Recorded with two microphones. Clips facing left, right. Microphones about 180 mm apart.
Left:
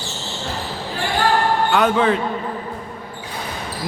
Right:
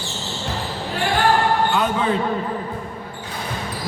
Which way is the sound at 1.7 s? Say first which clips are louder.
Left 4 dB; 70° left (ahead or behind).